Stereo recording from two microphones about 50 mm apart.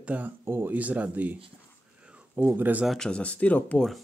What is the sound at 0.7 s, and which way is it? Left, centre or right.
Speech, right.